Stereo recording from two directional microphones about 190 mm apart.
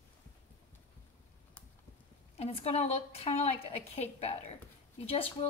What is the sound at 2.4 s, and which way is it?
A woman's voice, 35° left (ahead or behind).